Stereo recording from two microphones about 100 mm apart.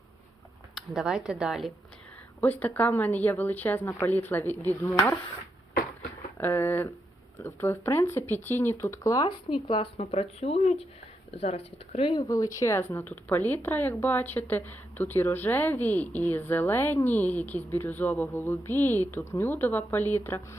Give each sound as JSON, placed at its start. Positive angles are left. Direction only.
{"t": 0.8, "sound": "speech", "side_deg": -5}
{"t": 2.4, "sound": "speech", "side_deg": 15}
{"t": 6.3, "sound": "speech", "side_deg": 20}
{"t": 9.6, "sound": "speech", "side_deg": 60}
{"t": 11.3, "sound": "speech", "side_deg": 90}
{"t": 12.3, "sound": "speech", "side_deg": 35}